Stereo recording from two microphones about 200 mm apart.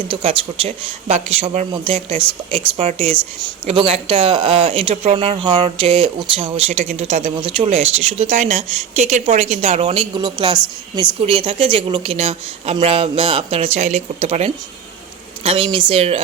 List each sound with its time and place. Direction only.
0.1 s speech: 25° right (ahead or behind)